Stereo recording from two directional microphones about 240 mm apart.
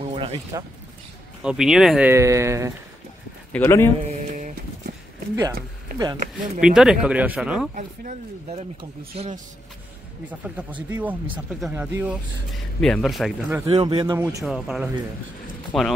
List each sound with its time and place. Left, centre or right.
0.0 s a sound: right
1.4 s speech: centre
3.5 s a man's voice: centre
5.9 s speech: centre
6.6 s speech: centre
7.7 s a man's voice: right
10.9 s speech: centre
13.7 s a man's voice: right
14.2 s speech: centre